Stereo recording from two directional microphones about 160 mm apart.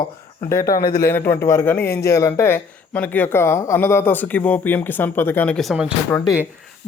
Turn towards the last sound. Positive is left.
turn(degrees=15)  # may be behind; listen again after turning